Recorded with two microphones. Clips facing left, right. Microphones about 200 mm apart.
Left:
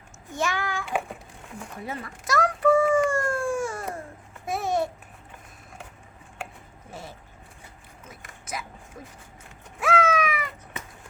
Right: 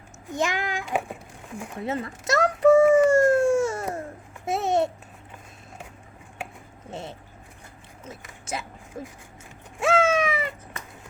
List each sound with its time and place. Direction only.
0.3 s a child's voice: 20° right (ahead or behind)
2.9 s baby cry: 25° right (ahead or behind)
4.4 s babbling: 25° right (ahead or behind)
6.9 s vehicle: 25° right (ahead or behind)
8.5 s speech: 30° right (ahead or behind)
9.8 s cat: 25° right (ahead or behind)